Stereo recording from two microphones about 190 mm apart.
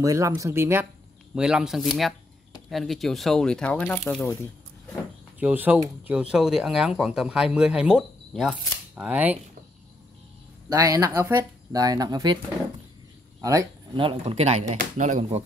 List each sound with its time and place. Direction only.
0.0 s speech: 15° right (ahead or behind); by 4.3 s 5° left (ahead or behind)
5.4 s speech: 10° right (ahead or behind)
10.7 s speech: 15° right (ahead or behind)
13.4 s speech: 20° right (ahead or behind)
14.0 s speech: 35° right (ahead or behind)